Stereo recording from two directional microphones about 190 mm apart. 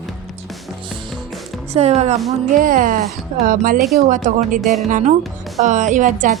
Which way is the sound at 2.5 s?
45° right (ahead or behind).